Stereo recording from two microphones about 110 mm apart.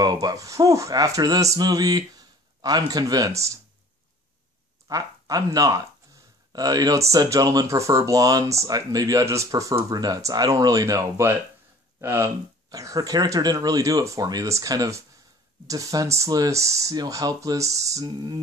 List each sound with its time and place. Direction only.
0.0 s speech: 35° right (ahead or behind)
4.8 s speech: 35° right (ahead or behind)
12.6 s speech: 35° right (ahead or behind)